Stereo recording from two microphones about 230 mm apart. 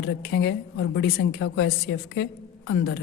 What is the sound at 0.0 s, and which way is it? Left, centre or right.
A woman's voice, left.